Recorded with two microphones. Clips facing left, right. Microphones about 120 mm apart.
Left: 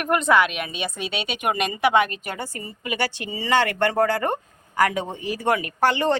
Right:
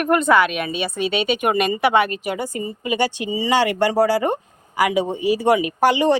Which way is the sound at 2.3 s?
15° right (ahead or behind).